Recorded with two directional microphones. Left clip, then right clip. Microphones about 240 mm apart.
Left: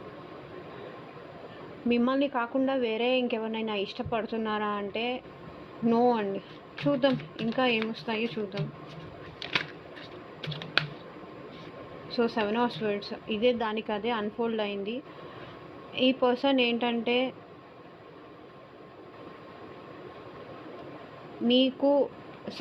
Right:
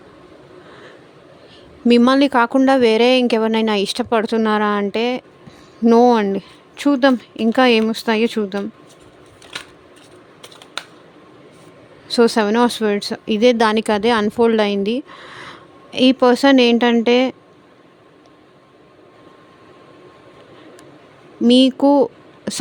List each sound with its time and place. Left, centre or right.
1.9 s a woman's voice: right
12.0 s a woman's voice: right
21.4 s speech: right